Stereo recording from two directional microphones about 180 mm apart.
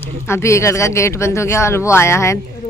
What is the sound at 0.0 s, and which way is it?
Speech, 15° left (ahead or behind).